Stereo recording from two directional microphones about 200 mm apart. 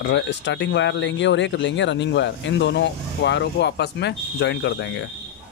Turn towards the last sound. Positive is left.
turn(degrees=60)  # may be behind; listen again after turning